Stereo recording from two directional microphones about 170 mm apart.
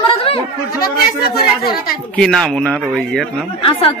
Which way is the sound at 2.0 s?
5° left (ahead or behind).